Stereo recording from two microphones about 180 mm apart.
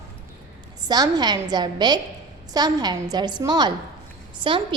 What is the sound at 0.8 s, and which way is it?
A woman's voice, 20° right (ahead or behind).